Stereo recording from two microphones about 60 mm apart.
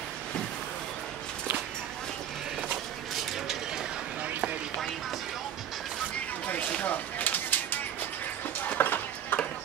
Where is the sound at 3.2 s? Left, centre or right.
Centre.